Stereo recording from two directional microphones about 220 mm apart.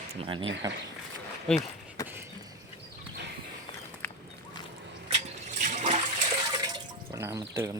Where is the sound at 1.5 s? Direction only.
5° left (ahead or behind).